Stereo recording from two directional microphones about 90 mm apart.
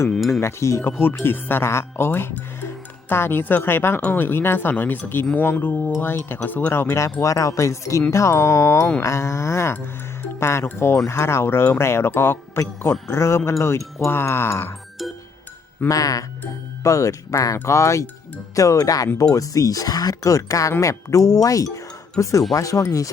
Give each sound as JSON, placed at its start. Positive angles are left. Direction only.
{"t": 0.3, "sound": "speech", "side_deg": 30}
{"t": 15.9, "sound": "speech", "side_deg": 40}